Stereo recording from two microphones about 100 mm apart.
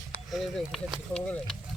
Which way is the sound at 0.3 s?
Centre (ahead or behind).